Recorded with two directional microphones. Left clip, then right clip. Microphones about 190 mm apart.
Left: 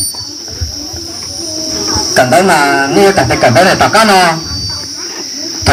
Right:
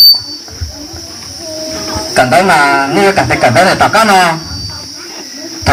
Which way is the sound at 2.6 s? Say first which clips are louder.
Left 1 dB; 30° left (ahead or behind).